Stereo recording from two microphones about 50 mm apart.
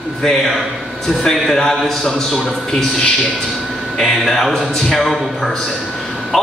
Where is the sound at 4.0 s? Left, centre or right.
Centre.